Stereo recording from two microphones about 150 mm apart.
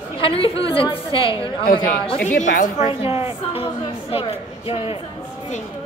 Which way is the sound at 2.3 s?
60° left (ahead or behind).